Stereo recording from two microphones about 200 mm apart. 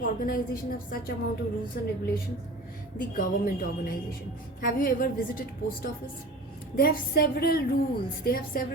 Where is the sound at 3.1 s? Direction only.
45° left (ahead or behind).